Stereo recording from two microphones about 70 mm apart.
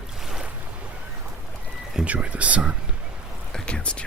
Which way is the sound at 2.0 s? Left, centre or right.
Centre.